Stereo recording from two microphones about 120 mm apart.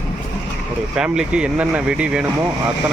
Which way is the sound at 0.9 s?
5° right (ahead or behind).